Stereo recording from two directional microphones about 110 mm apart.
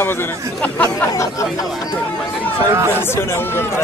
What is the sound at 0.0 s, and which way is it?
Speech, 20° left (ahead or behind).